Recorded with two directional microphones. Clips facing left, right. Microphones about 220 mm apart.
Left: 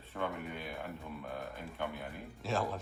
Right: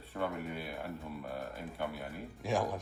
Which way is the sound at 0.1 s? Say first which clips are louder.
Right 2 dB; 5° right (ahead or behind).